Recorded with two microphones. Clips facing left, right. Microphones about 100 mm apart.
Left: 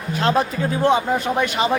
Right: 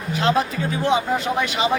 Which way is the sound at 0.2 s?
45° left (ahead or behind).